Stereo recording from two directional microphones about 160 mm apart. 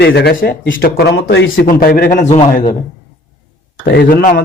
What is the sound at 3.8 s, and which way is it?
Speech, 90° left.